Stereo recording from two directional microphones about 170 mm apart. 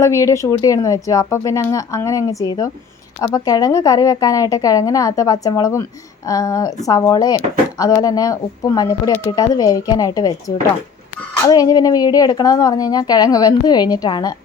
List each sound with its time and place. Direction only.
0.0 s speech: 15° left (ahead or behind)
11.4 s speech: 20° left (ahead or behind)